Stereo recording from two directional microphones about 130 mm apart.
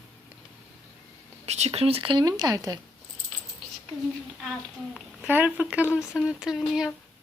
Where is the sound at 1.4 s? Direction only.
55° right (ahead or behind); by 2.8 s 30° right (ahead or behind).